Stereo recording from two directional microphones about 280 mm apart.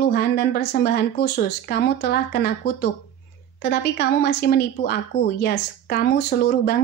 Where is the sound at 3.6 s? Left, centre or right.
Left.